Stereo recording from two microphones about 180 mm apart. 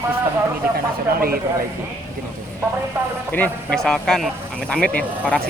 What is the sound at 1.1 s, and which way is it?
Speech, 55° right (ahead or behind).